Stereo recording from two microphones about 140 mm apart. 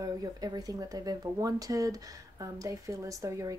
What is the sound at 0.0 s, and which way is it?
A woman's voice, 25° right (ahead or behind).